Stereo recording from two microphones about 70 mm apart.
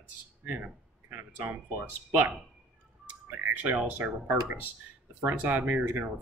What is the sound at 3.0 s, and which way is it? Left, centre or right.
Music, right.